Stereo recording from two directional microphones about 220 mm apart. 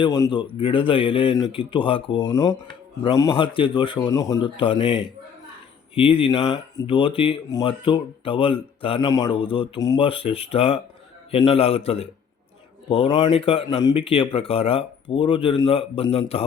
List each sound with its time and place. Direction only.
0.0 s speech: 20° left (ahead or behind)